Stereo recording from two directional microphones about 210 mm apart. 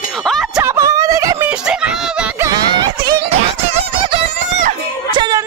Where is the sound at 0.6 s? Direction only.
15° right (ahead or behind).